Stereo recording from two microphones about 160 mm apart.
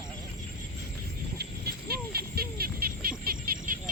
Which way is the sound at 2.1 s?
75° right (ahead or behind).